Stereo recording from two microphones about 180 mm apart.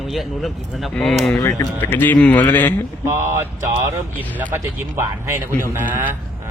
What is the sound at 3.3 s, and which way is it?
Speech, 15° right (ahead or behind).